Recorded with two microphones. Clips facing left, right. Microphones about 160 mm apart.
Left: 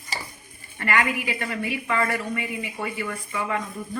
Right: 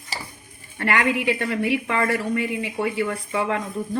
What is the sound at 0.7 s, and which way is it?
A woman's voice, 70° right (ahead or behind).